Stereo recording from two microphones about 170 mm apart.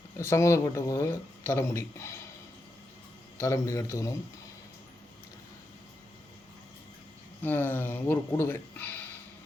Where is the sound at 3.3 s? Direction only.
20° left (ahead or behind).